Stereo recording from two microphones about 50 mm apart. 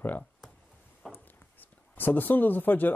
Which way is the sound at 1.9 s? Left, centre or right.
Left.